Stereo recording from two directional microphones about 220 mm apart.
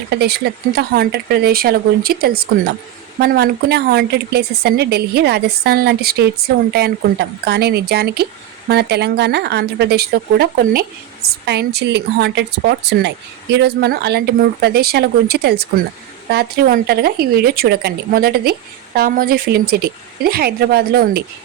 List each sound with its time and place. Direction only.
0.1 s speech: 45° right (ahead or behind)